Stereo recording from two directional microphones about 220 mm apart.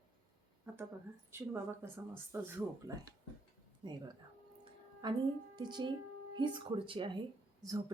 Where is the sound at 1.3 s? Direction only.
10° right (ahead or behind).